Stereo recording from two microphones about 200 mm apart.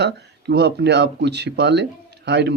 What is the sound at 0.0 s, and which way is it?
Speech, 60° right (ahead or behind).